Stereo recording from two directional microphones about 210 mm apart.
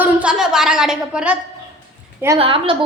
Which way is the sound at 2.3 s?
25° right (ahead or behind).